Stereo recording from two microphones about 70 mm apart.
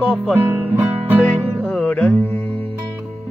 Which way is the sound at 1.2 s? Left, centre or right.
Centre.